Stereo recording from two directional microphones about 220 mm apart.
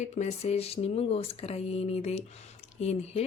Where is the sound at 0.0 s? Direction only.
30° left (ahead or behind).